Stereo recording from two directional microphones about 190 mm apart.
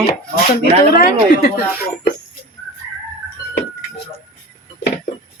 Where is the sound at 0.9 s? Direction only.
50° left (ahead or behind).